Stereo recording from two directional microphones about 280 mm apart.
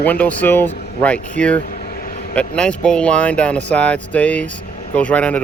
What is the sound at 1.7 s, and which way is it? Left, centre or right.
Vehicle, left.